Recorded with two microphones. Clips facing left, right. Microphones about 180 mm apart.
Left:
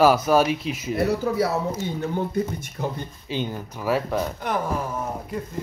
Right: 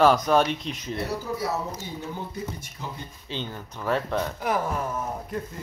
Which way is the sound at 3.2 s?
10° left (ahead or behind).